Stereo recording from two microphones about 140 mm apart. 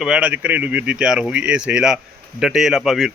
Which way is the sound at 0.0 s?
5° right (ahead or behind).